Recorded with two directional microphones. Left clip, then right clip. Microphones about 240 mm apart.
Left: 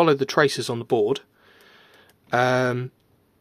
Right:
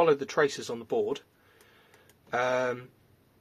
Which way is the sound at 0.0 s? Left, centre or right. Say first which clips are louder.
Left 6 dB; left.